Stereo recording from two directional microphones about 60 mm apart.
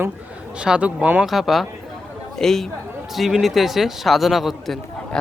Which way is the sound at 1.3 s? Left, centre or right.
Centre.